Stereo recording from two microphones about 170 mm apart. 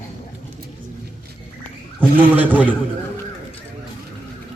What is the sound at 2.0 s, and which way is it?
Speech, 10° right (ahead or behind).